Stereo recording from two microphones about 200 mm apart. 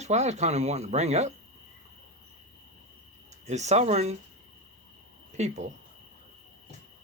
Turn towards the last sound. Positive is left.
turn(degrees=-35)  # may be behind; listen again after turning